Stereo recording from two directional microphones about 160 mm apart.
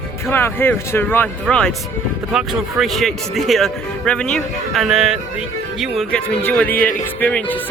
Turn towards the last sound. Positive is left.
turn(degrees=10)  # may be behind; listen again after turning